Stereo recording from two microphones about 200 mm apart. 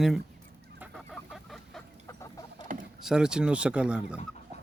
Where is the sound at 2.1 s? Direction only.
15° left (ahead or behind).